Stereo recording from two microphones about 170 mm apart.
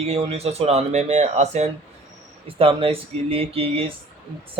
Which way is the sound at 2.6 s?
35° right (ahead or behind).